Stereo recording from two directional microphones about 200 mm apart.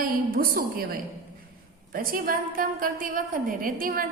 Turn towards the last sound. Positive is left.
turn(degrees=-45)  # may be behind; listen again after turning